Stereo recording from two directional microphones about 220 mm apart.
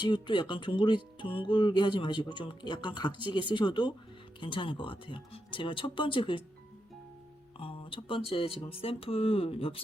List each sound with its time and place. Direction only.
0.0 s speech: 20° left (ahead or behind)
7.6 s speech: 25° left (ahead or behind)